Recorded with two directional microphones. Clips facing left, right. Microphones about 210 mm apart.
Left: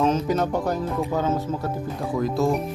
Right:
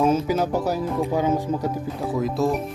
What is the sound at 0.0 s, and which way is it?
Speech, 5° right (ahead or behind).